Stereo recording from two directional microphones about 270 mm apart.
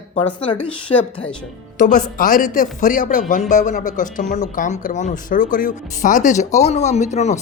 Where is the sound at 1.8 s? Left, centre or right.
Left.